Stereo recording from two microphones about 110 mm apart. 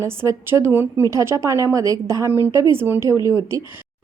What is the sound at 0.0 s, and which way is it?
A woman's voice, 25° right (ahead or behind).